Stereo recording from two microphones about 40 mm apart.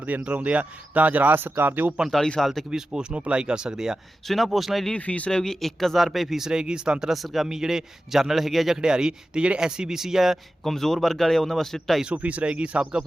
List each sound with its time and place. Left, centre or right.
0.0 s speech: right
1.4 s speech: right
2.0 s speech: centre
2.6 s speech: centre
4.4 s speech: centre
4.9 s speech: left
5.3 s speech: centre
7.1 s speech: centre
7.4 s a man's voice: centre
8.8 s a man's voice: centre
10.6 s speech: centre
12.0 s speech: right